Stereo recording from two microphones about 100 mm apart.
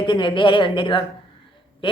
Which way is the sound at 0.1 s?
55° left (ahead or behind).